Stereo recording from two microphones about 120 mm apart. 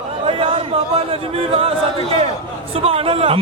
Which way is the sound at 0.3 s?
50° right (ahead or behind).